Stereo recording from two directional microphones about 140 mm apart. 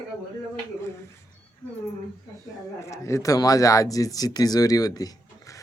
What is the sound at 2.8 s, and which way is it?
Speech, 20° left (ahead or behind).